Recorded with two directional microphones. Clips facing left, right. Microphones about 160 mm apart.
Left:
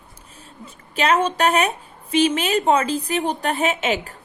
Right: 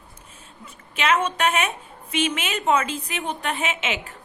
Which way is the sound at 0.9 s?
35° left (ahead or behind).